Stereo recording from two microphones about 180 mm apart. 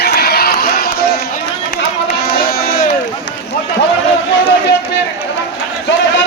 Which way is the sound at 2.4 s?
60° left (ahead or behind).